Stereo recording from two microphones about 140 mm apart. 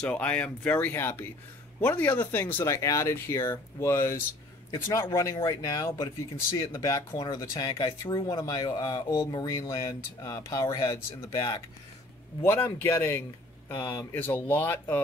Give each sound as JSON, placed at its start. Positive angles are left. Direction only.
{"t": 0.0, "sound": "speech", "side_deg": 10}
{"t": 7.5, "sound": "speech", "side_deg": 35}
{"t": 12.4, "sound": "speech", "side_deg": 15}